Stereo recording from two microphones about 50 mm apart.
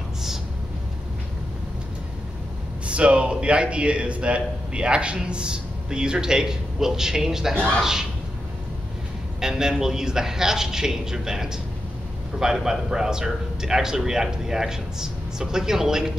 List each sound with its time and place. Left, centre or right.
2.9 s a man's voice: right
9.4 s a man's voice: centre